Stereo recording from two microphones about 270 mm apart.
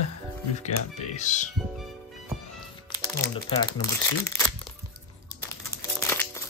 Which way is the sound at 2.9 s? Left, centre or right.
Centre.